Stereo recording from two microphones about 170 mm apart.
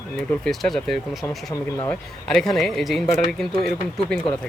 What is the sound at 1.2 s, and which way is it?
Speech, 15° left (ahead or behind).